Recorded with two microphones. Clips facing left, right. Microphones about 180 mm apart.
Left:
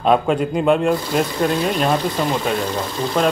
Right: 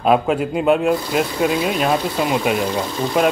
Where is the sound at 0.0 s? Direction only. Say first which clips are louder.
Even; 5° right (ahead or behind).